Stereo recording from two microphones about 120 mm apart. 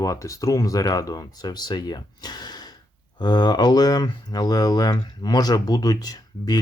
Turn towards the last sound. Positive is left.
turn(degrees=35)  # may be behind; listen again after turning